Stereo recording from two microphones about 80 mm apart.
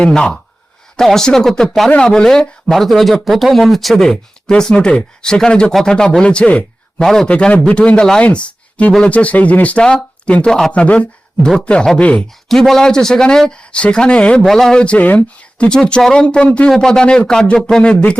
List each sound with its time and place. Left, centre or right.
0.0 s speech: centre
7.3 s speech: centre